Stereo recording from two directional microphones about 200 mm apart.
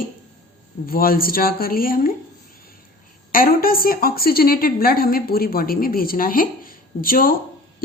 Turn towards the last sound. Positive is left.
turn(degrees=45)  # may be behind; listen again after turning